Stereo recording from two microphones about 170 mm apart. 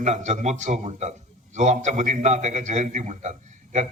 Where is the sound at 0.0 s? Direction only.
45° right (ahead or behind).